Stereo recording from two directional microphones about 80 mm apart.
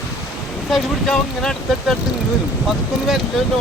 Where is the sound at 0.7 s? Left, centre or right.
Centre.